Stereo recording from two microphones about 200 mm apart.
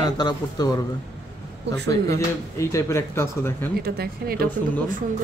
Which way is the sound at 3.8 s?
50° right (ahead or behind).